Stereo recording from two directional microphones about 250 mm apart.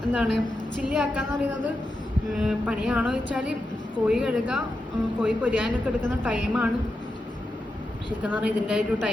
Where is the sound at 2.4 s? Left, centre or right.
Centre.